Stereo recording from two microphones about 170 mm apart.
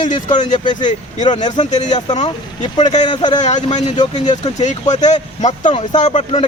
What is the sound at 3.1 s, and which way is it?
Speech, 25° left (ahead or behind).